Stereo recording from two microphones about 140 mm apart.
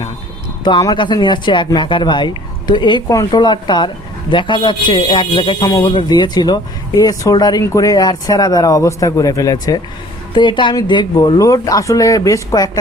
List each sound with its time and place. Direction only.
0.6 s speech: 30° left (ahead or behind)
10.3 s speech: 35° left (ahead or behind)